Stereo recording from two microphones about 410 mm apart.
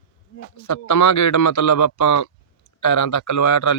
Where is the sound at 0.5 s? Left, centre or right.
Left.